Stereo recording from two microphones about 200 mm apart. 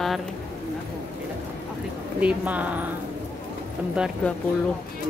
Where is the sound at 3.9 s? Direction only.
5° right (ahead or behind).